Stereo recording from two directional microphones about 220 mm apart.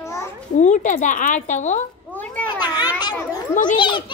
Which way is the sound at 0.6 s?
30° left (ahead or behind).